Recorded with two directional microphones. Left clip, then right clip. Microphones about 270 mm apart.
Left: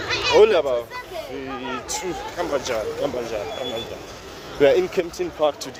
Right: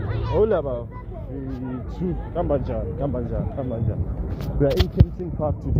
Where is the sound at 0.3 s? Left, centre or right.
Left.